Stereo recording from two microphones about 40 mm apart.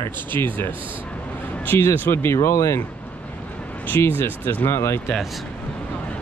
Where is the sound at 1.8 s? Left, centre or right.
Left.